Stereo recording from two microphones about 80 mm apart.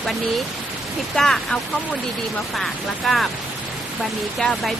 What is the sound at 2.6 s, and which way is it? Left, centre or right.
Speech, centre.